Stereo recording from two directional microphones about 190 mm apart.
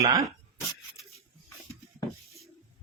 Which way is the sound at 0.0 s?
20° right (ahead or behind).